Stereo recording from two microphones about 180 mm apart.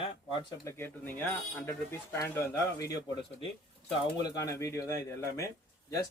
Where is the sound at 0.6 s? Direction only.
10° left (ahead or behind).